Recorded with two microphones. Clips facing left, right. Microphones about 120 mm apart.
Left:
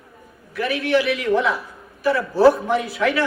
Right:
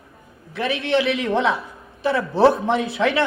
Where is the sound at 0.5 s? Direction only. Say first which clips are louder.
Left 1 dB; 25° right (ahead or behind).